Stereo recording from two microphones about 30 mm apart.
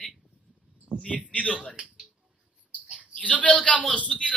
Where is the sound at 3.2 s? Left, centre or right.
Left.